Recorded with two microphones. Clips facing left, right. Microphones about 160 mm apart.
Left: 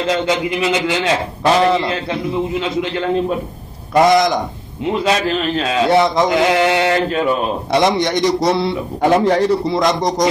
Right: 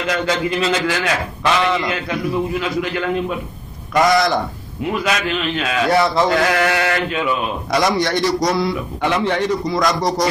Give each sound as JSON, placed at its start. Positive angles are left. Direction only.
{"t": 0.0, "sound": "a man's voice", "side_deg": 25}
{"t": 7.1, "sound": "a man's voice", "side_deg": 40}
{"t": 7.7, "sound": "a man's voice", "side_deg": 25}
{"t": 9.0, "sound": "a man's voice", "side_deg": 40}